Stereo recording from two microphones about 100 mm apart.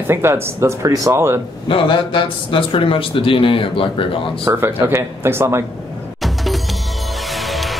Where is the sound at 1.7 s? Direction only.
55° left (ahead or behind).